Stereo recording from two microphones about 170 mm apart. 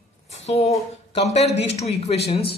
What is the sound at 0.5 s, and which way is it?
Speech, 40° left (ahead or behind).